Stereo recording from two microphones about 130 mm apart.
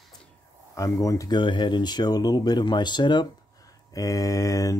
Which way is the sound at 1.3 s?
35° left (ahead or behind).